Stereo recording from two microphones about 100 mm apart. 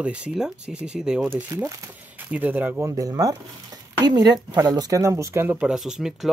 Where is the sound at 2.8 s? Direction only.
35° right (ahead or behind).